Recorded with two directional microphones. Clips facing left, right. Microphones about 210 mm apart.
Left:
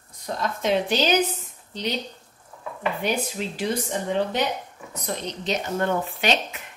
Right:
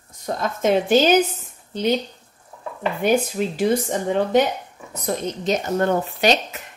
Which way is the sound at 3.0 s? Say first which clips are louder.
Right 11 dB; 50° right (ahead or behind).